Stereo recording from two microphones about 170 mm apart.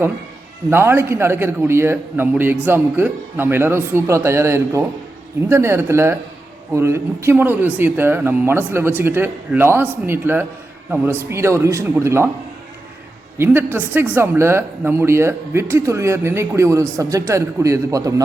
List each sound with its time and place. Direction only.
0.7 s speech: 15° right (ahead or behind)
13.4 s speech: 10° right (ahead or behind)